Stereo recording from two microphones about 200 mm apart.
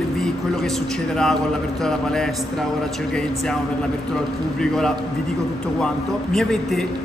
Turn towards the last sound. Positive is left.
turn(degrees=5)  # may be behind; listen again after turning